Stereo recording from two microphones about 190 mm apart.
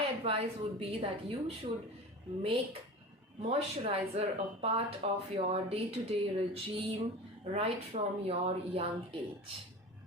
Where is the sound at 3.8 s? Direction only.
30° right (ahead or behind).